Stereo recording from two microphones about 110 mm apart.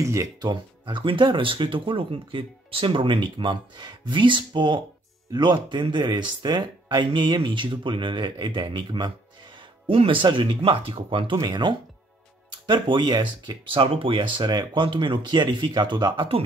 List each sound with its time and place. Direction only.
0.0 s speech: 30° right (ahead or behind)
0.5 s speech: 45° right (ahead or behind)